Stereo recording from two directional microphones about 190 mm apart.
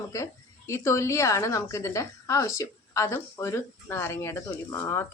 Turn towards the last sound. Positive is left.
turn(degrees=15)  # may be behind; listen again after turning